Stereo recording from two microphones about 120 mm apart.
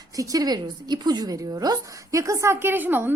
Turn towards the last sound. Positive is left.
turn(degrees=-15)  # may be behind; listen again after turning